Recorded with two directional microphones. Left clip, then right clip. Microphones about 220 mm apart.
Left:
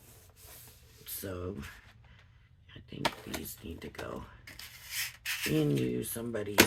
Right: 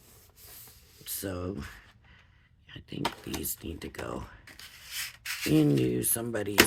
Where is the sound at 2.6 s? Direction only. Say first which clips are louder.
Right 6 dB; 45° right (ahead or behind).